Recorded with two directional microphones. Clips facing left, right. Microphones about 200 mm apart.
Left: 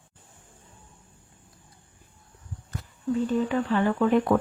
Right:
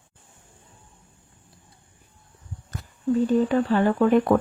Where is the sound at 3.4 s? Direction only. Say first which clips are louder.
Right 4 dB; 40° right (ahead or behind).